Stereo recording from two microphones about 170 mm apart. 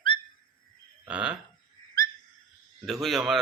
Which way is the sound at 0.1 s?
30° left (ahead or behind).